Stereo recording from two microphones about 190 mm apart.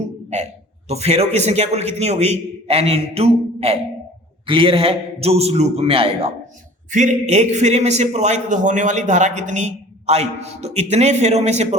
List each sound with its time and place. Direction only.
0.9 s a man's voice: 35° right (ahead or behind)